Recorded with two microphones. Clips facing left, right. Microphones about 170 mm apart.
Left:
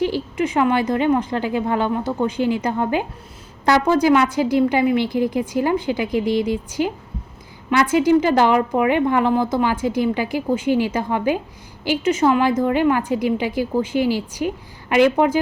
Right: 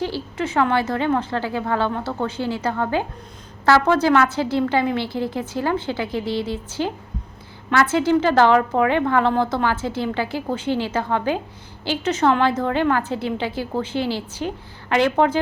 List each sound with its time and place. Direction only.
0.0 s a woman's voice: 15° left (ahead or behind)